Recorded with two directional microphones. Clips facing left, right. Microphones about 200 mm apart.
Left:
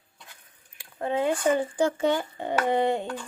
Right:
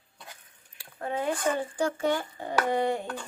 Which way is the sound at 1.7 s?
25° left (ahead or behind).